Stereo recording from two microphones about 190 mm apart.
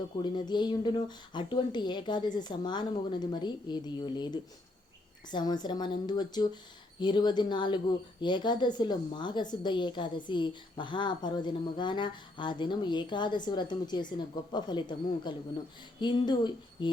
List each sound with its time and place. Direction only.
0.2 s speech: 25° left (ahead or behind)